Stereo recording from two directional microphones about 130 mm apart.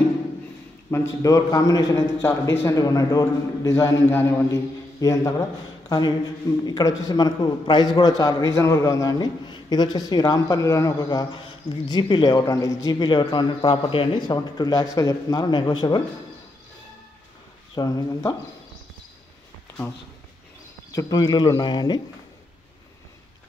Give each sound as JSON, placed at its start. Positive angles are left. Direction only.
{"t": 0.8, "sound": "a man's voice", "side_deg": 25}
{"t": 17.7, "sound": "a man's voice", "side_deg": 30}
{"t": 20.9, "sound": "a man's voice", "side_deg": 25}